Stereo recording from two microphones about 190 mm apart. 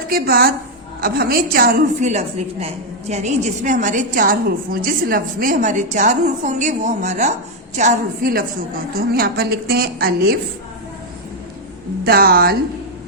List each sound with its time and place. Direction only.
0.1 s a woman's voice: 50° right (ahead or behind)
12.0 s a woman's voice: 55° right (ahead or behind)